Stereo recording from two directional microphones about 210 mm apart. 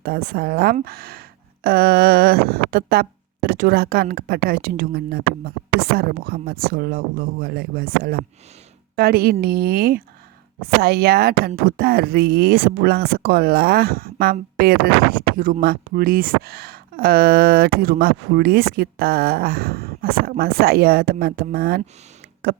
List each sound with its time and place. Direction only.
0.0 s speech: 50° right (ahead or behind)